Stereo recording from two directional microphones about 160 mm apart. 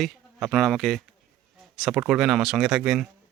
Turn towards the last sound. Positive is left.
turn(degrees=-5)  # may be behind; listen again after turning